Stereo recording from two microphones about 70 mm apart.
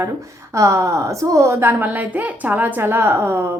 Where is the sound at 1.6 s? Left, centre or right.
Right.